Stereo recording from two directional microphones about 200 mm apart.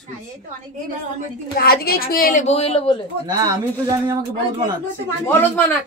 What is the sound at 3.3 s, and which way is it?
Speech, 20° right (ahead or behind).